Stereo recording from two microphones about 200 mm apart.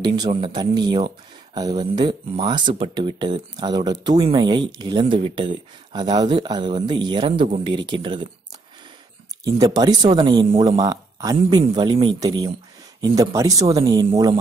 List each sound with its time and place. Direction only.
0.0 s speech: 20° right (ahead or behind)
9.4 s speech: 20° right (ahead or behind)